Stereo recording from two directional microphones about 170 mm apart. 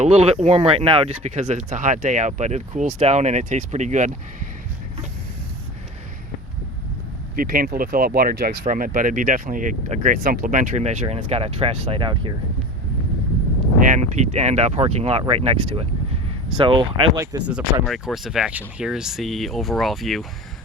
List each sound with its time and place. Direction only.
0.0 s speech: 40° right (ahead or behind)
7.3 s speech: 55° right (ahead or behind); by 12.3 s 30° right (ahead or behind)
13.9 s speech: 45° right (ahead or behind); by 17.5 s 20° right (ahead or behind)
17.8 s speech: centre (ahead or behind)